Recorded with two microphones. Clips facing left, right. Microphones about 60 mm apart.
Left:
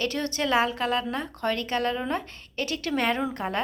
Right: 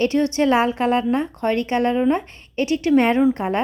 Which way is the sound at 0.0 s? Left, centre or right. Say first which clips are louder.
Right 10 dB; right.